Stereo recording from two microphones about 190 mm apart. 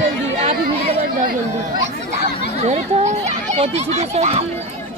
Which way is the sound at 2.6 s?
35° right (ahead or behind).